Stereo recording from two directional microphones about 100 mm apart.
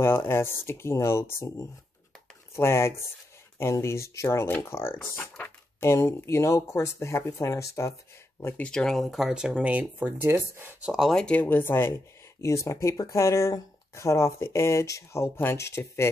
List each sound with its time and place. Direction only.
0.0 s speech: 20° left (ahead or behind)
5.3 s a sound: 15° left (ahead or behind)
5.9 s speech: 30° left (ahead or behind)
8.6 s speech: 5° left (ahead or behind); by 10.9 s 20° right (ahead or behind)
10.9 s speech: 5° right (ahead or behind)
11.1 s speech: 10° left (ahead or behind)
11.4 s speech: 20° left (ahead or behind)